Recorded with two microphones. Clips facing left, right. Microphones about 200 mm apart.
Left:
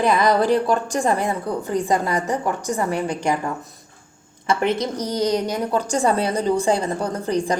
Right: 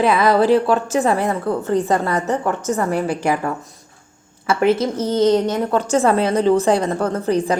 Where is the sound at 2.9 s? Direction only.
5° right (ahead or behind).